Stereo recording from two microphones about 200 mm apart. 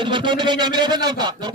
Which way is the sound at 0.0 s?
25° right (ahead or behind).